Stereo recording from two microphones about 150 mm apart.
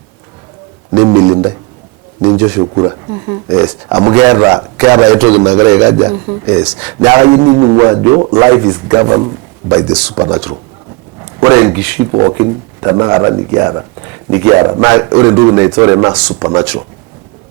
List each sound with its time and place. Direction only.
0.9 s a man's voice: 25° right (ahead or behind)
2.7 s a man's voice: 25° right (ahead or behind)
6.6 s speech: 10° right (ahead or behind)
7.3 s music: 30° right (ahead or behind)
7.6 s a man's voice: 25° right (ahead or behind)
11.4 s speech: 20° right (ahead or behind)
12.1 s a man's voice: 25° right (ahead or behind)